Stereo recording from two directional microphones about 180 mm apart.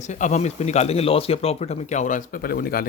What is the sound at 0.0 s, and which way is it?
Speech, 40° left (ahead or behind).